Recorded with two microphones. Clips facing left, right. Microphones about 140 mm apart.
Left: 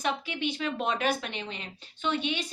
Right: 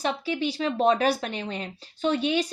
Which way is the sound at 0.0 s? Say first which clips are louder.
Right 4 dB; 35° right (ahead or behind).